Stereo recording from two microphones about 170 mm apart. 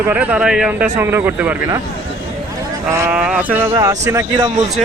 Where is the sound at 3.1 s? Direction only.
5° right (ahead or behind).